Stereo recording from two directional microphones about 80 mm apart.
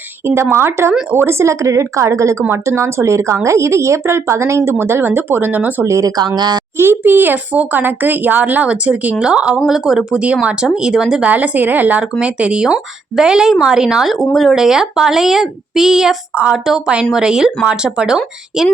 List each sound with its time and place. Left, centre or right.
0.5 s a woman's voice: right
5.8 s a woman's voice: right
6.1 s speech: right
6.7 s speech: right; by 11.3 s centre
11.3 s speech: centre
16.3 s speech: centre